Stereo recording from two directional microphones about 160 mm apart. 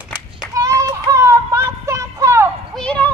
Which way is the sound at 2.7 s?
5° left (ahead or behind).